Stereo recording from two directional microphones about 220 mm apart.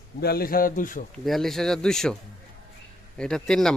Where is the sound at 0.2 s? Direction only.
45° left (ahead or behind).